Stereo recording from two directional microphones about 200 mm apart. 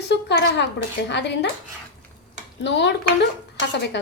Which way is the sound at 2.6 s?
60° left (ahead or behind).